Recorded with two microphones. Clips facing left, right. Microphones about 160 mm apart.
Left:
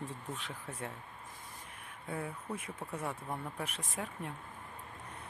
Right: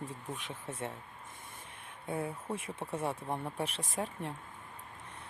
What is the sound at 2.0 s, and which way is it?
Speech, 25° right (ahead or behind).